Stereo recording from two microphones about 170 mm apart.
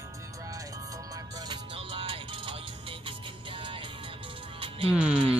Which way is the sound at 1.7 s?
30° right (ahead or behind).